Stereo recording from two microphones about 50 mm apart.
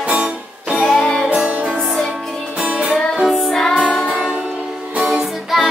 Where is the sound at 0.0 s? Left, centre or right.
Right.